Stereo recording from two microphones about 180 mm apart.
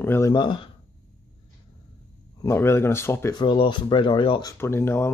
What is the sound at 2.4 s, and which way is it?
Speech, 15° left (ahead or behind).